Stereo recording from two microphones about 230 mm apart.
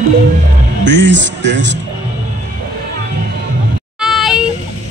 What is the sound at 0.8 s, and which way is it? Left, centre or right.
Speech, right.